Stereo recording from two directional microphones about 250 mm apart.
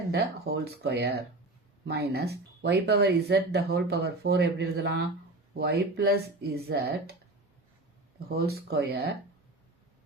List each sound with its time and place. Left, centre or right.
0.1 s speech: right
8.4 s speech: right